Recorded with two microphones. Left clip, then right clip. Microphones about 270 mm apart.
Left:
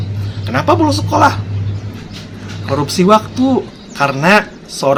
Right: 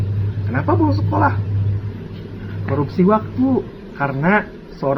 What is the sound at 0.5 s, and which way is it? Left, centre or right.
Speech, left.